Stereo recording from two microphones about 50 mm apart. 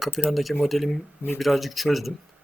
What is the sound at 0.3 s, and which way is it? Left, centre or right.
Speech, centre.